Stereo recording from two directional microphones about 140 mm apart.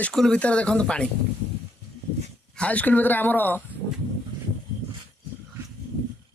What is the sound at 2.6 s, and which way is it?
Speech, 10° left (ahead or behind).